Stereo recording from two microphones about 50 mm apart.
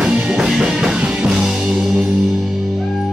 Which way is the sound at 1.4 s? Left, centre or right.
Centre.